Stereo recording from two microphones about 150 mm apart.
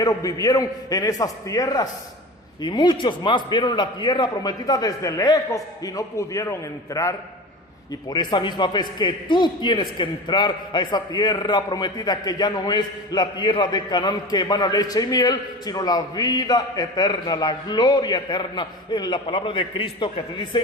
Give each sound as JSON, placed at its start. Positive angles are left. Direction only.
{"t": 0.0, "sound": "a man's voice", "side_deg": 25}